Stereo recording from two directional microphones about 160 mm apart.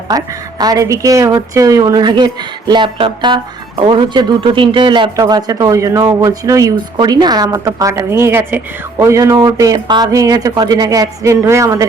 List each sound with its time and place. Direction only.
0.1 s speech: 20° right (ahead or behind)